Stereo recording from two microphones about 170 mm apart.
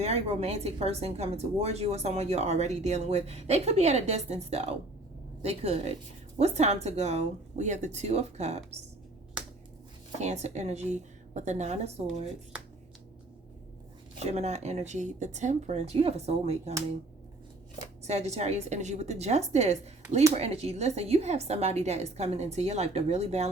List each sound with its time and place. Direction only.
0.0 s a woman's voice: 35° right (ahead or behind)
10.2 s a woman's voice: 40° right (ahead or behind)
14.3 s a woman's voice: 40° right (ahead or behind)
18.0 s a woman's voice: 40° right (ahead or behind)